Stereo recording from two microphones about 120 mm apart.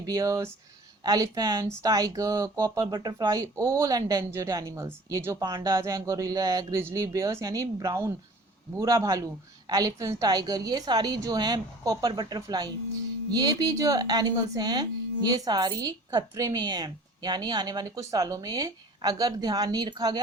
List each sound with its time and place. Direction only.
0.0 s a woman's voice: 30° right (ahead or behind)